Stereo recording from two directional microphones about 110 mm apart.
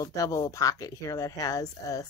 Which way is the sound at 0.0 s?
30° left (ahead or behind).